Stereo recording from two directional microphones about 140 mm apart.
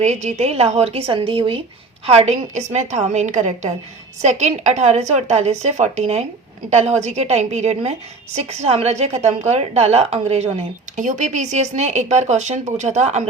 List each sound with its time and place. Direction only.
0.0 s a woman's voice: 55° right (ahead or behind)